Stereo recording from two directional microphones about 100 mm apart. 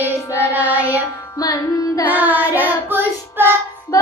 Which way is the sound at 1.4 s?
35° left (ahead or behind).